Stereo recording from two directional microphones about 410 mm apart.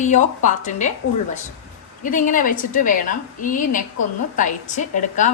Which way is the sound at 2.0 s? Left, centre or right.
Centre.